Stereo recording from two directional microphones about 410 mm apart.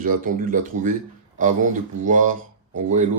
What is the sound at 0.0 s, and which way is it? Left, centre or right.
Speech, centre.